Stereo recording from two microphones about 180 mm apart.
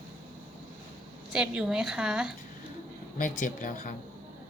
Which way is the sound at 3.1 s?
45° left (ahead or behind).